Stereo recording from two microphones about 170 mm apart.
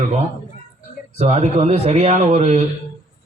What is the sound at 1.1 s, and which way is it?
Speech, 40° right (ahead or behind).